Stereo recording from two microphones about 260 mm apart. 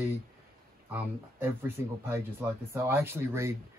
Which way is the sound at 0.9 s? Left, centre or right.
Centre.